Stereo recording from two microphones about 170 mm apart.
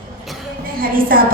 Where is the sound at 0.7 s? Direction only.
55° right (ahead or behind).